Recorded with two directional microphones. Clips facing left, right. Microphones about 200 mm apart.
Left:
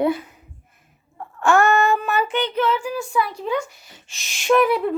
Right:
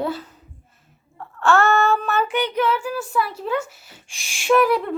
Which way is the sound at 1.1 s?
15° left (ahead or behind).